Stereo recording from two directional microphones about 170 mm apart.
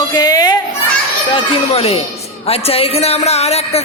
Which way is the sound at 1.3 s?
35° left (ahead or behind).